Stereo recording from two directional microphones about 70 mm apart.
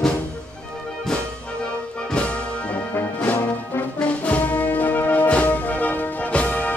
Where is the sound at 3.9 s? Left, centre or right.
Left.